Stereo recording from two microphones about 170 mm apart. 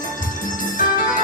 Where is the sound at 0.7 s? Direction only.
50° left (ahead or behind).